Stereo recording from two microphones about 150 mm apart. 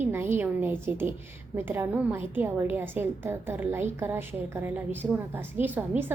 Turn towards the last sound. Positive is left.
turn(degrees=-15)  # may be behind; listen again after turning